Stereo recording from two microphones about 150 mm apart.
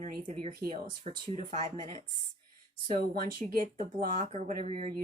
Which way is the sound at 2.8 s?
75° right (ahead or behind).